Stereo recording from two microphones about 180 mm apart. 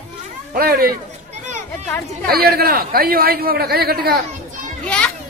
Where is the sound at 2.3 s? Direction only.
55° right (ahead or behind).